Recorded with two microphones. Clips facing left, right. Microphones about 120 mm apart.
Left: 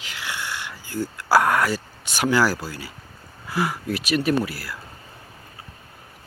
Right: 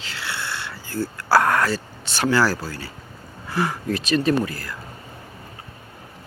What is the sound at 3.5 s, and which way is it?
Speech, 10° left (ahead or behind).